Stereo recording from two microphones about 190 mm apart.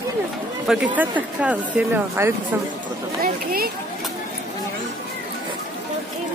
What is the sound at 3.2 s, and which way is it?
Speech, 50° right (ahead or behind).